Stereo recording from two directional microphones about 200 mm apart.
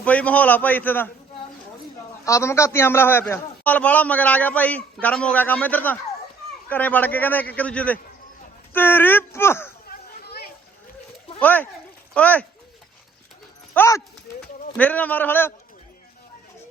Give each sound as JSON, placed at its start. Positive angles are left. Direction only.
{"t": 0.0, "sound": "a man's voice", "side_deg": 5}
{"t": 2.2, "sound": "a man's voice", "side_deg": 15}
{"t": 9.9, "sound": "a sound", "side_deg": 50}
{"t": 11.3, "sound": "a man's voice", "side_deg": 10}
{"t": 13.7, "sound": "a man's voice", "side_deg": 15}